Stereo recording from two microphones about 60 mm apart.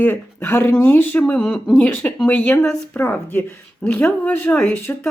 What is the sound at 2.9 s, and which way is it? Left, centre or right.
Speech, left.